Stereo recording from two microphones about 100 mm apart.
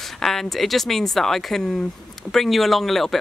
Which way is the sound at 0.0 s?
5° left (ahead or behind).